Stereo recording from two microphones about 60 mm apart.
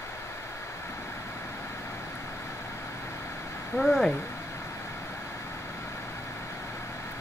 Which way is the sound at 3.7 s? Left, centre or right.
Centre.